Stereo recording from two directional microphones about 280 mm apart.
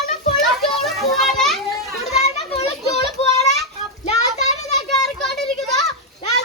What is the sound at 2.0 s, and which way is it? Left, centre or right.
Children playing, left.